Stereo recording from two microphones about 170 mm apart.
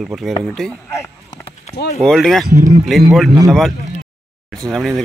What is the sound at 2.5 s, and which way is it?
Speech, 45° right (ahead or behind).